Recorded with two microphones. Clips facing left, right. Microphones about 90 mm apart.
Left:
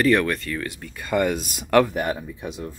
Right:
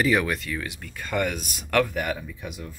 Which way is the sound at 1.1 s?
20° left (ahead or behind).